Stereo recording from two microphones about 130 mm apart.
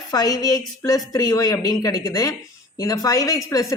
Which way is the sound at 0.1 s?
30° left (ahead or behind).